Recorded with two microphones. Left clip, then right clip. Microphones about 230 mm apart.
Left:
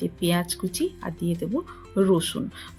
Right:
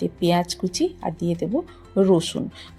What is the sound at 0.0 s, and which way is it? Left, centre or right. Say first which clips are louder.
Speech: right 5 dB; centre.